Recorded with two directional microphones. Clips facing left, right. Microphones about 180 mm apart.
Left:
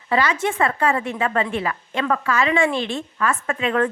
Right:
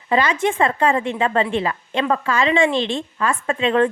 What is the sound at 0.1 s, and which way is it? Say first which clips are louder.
A woman's voice: right 2 dB; 25° right (ahead or behind).